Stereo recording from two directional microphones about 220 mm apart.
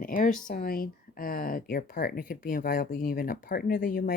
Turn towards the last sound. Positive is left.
turn(degrees=40)  # may be behind; listen again after turning